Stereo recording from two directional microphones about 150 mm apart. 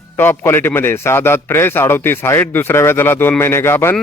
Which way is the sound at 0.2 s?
15° left (ahead or behind).